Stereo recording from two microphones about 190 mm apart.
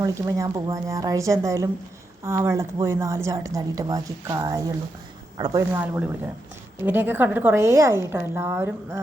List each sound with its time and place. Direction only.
0.0 s a woman's voice: 15° right (ahead or behind)